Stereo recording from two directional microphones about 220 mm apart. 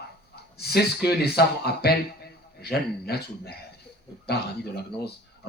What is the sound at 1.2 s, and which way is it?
Speech, 45° left (ahead or behind).